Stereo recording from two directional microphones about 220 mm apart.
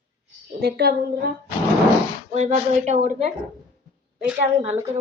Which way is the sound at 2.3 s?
30° right (ahead or behind).